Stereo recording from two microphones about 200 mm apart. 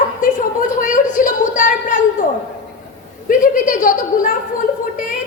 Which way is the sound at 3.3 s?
40° left (ahead or behind).